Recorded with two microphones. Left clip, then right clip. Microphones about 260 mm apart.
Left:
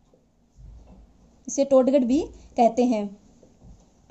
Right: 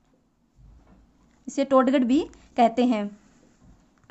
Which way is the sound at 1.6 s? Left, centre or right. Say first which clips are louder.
Left 2 dB; right.